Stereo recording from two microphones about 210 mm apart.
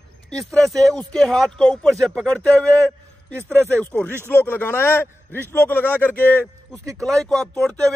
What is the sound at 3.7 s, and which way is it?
A man's voice, 10° left (ahead or behind).